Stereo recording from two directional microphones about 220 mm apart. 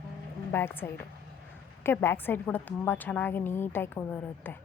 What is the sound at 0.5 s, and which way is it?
A woman's voice, 10° left (ahead or behind).